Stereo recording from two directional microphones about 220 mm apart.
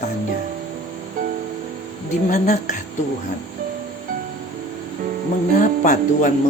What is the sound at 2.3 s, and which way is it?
Speech, 35° left (ahead or behind).